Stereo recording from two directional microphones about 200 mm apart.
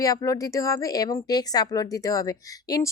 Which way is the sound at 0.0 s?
15° left (ahead or behind).